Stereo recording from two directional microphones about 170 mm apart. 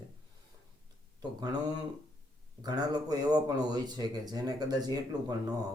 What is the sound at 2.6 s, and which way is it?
A man's voice, 25° right (ahead or behind).